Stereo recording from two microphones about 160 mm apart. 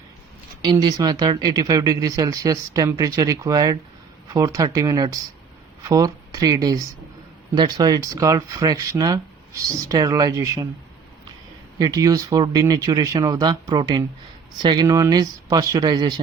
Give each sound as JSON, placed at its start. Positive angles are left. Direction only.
{"t": 0.6, "sound": "speech", "side_deg": -30}
{"t": 11.8, "sound": "speech", "side_deg": -20}